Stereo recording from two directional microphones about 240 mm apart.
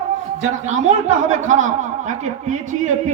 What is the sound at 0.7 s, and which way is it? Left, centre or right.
Speech, right.